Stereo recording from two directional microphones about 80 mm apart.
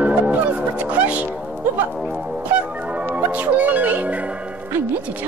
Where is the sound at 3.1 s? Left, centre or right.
Centre.